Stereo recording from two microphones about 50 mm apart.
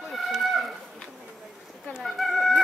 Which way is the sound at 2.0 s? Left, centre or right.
Centre.